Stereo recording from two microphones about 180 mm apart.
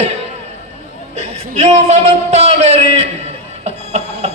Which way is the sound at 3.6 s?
35° right (ahead or behind).